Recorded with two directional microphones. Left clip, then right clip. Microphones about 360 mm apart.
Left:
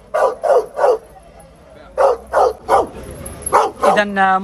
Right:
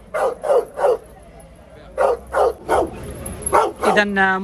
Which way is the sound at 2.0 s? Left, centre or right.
Centre.